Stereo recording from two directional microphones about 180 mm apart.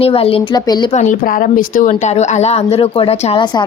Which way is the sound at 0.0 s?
30° left (ahead or behind).